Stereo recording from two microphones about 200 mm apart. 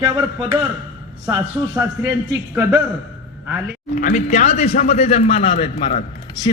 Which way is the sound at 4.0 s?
40° left (ahead or behind).